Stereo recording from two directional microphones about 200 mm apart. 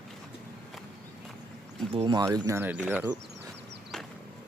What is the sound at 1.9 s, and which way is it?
Speech, 20° right (ahead or behind).